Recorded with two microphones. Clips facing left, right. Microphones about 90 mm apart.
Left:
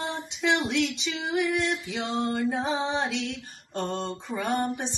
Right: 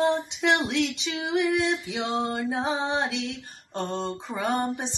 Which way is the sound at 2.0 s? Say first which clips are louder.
Even; 20° right (ahead or behind).